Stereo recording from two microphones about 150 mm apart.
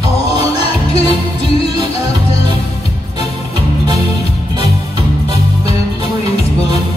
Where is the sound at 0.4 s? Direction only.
40° left (ahead or behind).